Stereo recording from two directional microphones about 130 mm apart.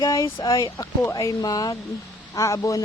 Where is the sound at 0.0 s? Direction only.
30° left (ahead or behind).